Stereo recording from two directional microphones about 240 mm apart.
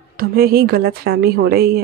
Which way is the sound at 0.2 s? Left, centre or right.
Right.